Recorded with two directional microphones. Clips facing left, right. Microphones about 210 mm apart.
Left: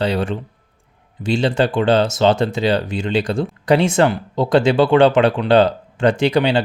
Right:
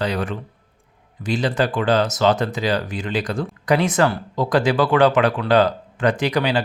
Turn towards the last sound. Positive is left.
turn(degrees=25)  # may be behind; listen again after turning